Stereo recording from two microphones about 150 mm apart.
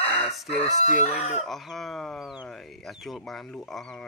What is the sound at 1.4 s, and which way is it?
Speech, centre (ahead or behind).